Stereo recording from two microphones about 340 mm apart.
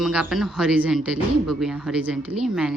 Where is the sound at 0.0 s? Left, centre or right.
Centre.